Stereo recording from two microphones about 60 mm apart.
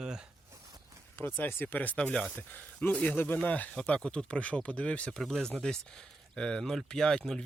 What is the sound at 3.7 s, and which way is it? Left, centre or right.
Speech, centre.